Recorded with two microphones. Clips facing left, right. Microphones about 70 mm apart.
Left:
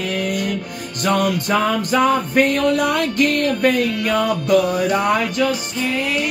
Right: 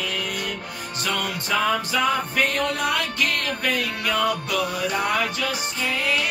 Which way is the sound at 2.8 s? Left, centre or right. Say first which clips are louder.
Left 6 dB; left.